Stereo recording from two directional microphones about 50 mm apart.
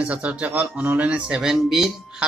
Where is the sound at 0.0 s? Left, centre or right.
Right.